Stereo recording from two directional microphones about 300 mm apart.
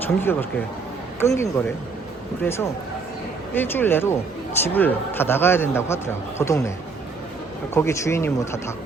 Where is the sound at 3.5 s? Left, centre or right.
Centre.